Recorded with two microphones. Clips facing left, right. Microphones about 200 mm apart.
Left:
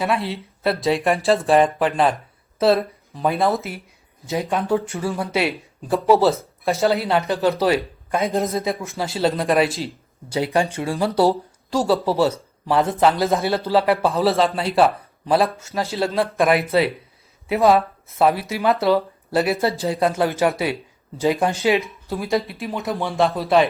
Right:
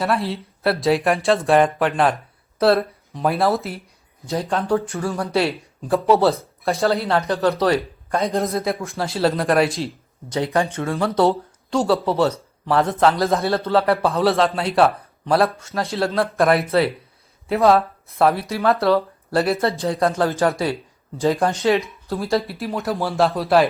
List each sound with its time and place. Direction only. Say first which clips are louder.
0.0 s speech: right 1 dB; centre (ahead or behind)
4.9 s speech: even; 15° left (ahead or behind)
5.3 s speech: right 2 dB; centre (ahead or behind)
10.8 s speech: right 1 dB; 10° left (ahead or behind)
11.3 s speech: even; 30° left (ahead or behind)
12.6 s speech: even; centre (ahead or behind)